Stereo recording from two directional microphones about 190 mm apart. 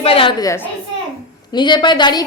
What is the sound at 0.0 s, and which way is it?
A woman's voice, 30° left (ahead or behind).